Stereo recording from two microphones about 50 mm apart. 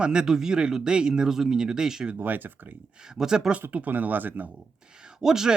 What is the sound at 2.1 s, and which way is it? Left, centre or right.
Speech, right.